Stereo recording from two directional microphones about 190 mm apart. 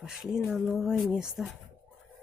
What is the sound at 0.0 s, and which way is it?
Speech, 5° right (ahead or behind).